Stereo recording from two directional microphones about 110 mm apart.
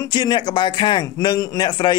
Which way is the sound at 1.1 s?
35° left (ahead or behind).